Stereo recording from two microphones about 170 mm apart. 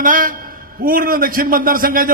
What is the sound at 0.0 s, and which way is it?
A man's voice, 55° right (ahead or behind).